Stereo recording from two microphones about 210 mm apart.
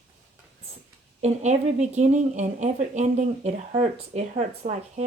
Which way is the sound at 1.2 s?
35° right (ahead or behind).